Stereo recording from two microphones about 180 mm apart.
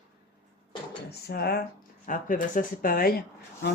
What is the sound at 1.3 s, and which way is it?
Speech, 60° left (ahead or behind).